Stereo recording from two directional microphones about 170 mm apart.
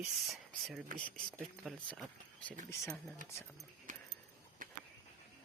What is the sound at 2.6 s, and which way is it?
Speech, 15° left (ahead or behind).